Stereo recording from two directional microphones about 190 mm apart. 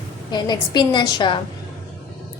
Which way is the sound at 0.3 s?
20° left (ahead or behind).